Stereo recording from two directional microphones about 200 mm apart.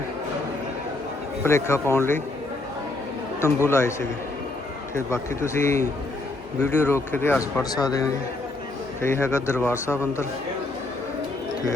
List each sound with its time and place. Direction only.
1.5 s a man's voice: 15° left (ahead or behind)
3.4 s a man's voice: 15° left (ahead or behind)
4.9 s a man's voice: 15° left (ahead or behind)